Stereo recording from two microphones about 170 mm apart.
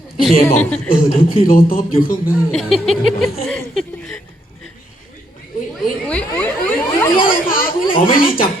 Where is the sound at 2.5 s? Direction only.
Centre (ahead or behind).